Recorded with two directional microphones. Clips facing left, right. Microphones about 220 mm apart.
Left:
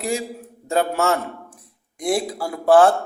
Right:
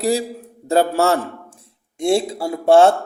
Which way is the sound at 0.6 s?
35° right (ahead or behind).